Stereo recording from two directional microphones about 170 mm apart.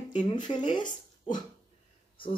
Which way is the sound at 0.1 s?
25° left (ahead or behind).